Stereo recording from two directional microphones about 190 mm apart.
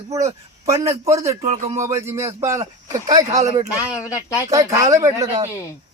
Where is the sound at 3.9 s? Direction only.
20° left (ahead or behind).